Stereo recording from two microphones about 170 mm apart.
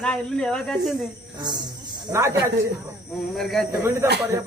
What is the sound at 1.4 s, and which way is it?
Speech, 25° right (ahead or behind).